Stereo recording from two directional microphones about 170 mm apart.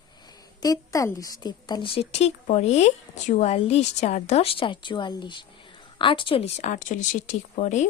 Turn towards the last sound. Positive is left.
turn(degrees=45)  # may be behind; listen again after turning